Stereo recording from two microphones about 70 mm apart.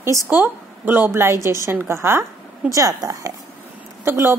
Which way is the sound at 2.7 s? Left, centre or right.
Right.